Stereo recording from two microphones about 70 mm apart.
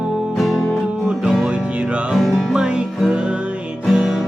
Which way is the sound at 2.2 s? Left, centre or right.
Centre.